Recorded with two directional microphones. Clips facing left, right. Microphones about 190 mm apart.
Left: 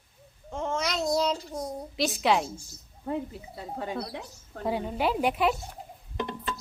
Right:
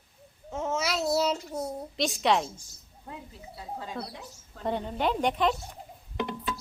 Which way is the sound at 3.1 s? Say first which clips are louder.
Left 11 dB; 60° left (ahead or behind).